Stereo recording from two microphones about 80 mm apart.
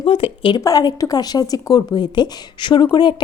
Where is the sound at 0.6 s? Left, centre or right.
Left.